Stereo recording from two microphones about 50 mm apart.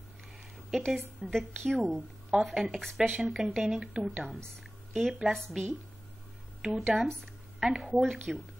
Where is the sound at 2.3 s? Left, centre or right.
Right.